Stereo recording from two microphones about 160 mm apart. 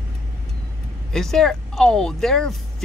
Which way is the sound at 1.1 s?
5° left (ahead or behind).